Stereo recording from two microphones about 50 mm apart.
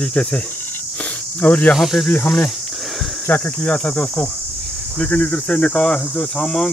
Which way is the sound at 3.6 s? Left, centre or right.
Left.